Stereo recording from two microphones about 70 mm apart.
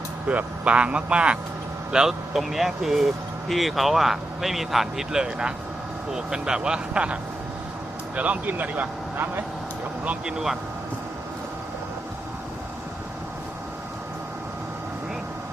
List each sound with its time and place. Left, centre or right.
0.3 s speech: centre
10.0 s speech: centre